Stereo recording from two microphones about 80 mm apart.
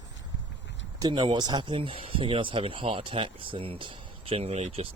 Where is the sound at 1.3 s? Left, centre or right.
Right.